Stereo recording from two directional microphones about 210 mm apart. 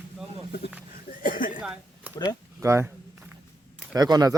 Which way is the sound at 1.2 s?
40° left (ahead or behind).